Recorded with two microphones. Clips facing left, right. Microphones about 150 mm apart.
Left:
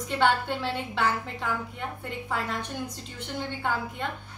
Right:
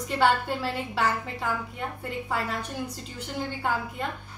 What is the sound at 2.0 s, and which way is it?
Speech, 5° right (ahead or behind).